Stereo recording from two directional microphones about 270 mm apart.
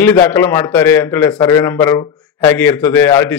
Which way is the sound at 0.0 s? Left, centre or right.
Centre.